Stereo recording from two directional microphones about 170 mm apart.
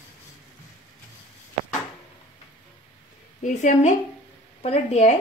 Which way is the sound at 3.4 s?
45° left (ahead or behind).